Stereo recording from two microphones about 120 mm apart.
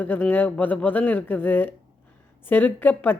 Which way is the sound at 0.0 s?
15° left (ahead or behind).